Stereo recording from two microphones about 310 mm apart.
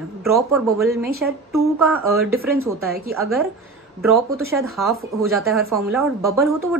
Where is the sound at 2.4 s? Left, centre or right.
Right.